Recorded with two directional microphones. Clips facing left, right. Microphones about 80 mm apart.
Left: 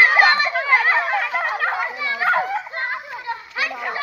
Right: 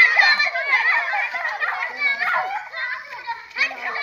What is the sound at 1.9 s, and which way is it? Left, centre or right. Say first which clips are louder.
Dog: even; left.